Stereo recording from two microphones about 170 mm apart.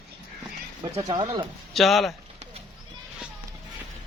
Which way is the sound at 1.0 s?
25° right (ahead or behind).